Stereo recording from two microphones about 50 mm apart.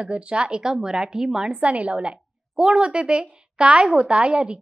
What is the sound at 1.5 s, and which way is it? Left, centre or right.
A woman's voice, right.